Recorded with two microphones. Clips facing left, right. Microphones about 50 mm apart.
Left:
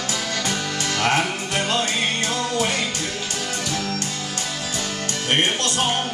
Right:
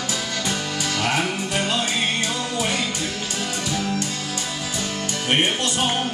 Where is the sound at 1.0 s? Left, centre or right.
Left.